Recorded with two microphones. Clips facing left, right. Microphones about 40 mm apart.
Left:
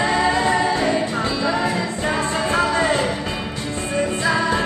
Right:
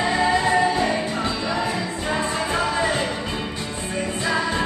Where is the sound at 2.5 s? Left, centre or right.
Left.